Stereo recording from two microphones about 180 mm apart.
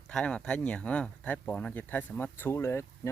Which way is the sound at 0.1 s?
5° left (ahead or behind).